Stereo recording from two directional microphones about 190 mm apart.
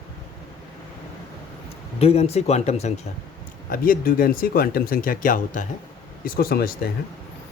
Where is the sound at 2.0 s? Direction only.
30° left (ahead or behind).